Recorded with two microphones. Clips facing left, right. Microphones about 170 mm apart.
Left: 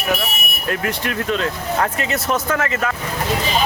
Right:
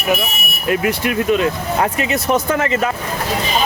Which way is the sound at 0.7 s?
10° right (ahead or behind).